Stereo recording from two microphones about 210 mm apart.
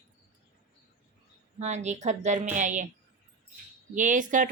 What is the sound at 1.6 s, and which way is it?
Speech, 35° right (ahead or behind).